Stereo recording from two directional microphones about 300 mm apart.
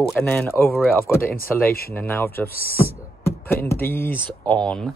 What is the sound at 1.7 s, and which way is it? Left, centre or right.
Speech, left.